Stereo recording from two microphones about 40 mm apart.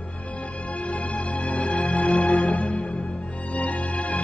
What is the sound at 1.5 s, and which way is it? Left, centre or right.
Music, left.